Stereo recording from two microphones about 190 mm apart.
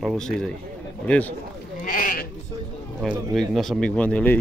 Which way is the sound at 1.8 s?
45° left (ahead or behind).